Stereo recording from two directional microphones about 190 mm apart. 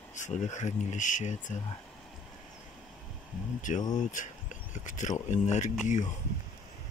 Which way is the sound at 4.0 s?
40° left (ahead or behind).